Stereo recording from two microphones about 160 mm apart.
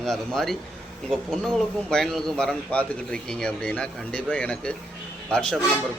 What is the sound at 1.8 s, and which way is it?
A man's voice, 5° left (ahead or behind).